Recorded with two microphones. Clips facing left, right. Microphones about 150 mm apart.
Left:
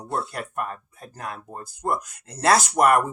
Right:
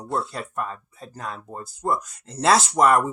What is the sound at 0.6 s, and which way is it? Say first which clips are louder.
Speech: even; 55° left (ahead or behind).